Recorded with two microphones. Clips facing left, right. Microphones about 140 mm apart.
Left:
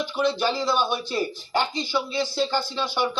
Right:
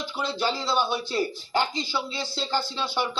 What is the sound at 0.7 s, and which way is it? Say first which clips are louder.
A man's voice: left 2 dB; 15° left (ahead or behind).